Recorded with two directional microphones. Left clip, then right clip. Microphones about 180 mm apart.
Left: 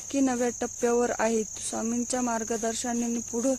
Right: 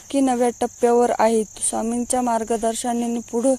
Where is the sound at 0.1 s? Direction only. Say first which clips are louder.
Right 8 dB; 20° right (ahead or behind).